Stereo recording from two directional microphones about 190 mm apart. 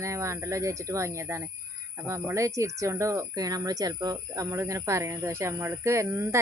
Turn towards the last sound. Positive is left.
turn(degrees=-15)  # may be behind; listen again after turning